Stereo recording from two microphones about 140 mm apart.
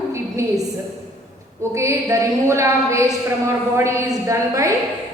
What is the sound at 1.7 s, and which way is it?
A woman's voice, 20° right (ahead or behind).